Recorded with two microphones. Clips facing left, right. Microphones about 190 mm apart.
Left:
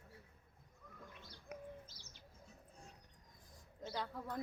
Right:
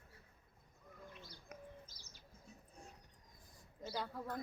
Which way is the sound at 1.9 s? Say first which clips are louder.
Left 1 dB; 45° right (ahead or behind).